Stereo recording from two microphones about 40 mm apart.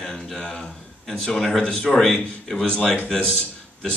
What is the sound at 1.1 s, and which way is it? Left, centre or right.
A man's voice, centre.